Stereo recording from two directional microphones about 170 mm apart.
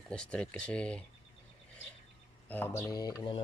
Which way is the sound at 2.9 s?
20° left (ahead or behind).